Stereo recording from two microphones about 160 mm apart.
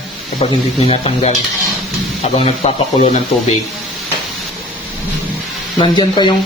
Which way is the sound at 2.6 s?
45° left (ahead or behind).